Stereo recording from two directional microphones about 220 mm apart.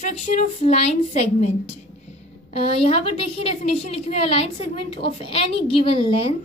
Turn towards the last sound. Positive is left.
turn(degrees=25)  # may be behind; listen again after turning